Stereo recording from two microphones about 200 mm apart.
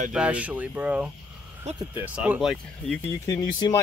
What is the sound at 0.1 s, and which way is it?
Speech, 5° right (ahead or behind).